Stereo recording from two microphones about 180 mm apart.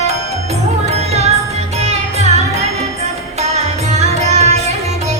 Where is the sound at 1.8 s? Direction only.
35° right (ahead or behind).